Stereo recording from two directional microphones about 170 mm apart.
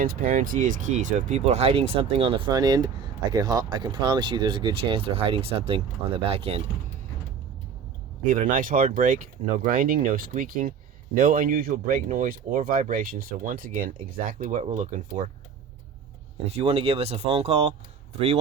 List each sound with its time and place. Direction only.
0.0 s speech: 55° right (ahead or behind); by 6.6 s 35° right (ahead or behind)
8.3 s speech: 50° right (ahead or behind)
16.5 s speech: 35° right (ahead or behind)